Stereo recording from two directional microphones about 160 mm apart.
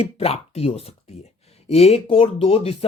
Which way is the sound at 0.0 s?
40° left (ahead or behind).